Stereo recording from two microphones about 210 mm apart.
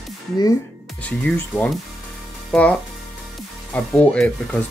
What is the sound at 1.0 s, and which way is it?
Speech, 5° left (ahead or behind).